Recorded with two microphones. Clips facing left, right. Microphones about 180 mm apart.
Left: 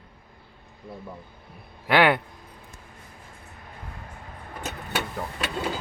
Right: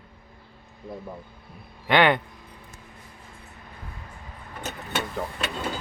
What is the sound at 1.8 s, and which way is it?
Speech, 5° left (ahead or behind).